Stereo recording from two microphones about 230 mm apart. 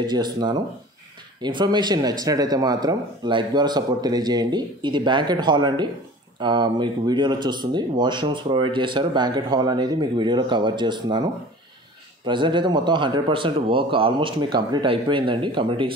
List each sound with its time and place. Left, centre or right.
0.0 s speech: centre
12.3 s speech: right